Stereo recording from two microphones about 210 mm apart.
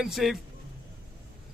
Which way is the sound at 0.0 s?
Centre (ahead or behind).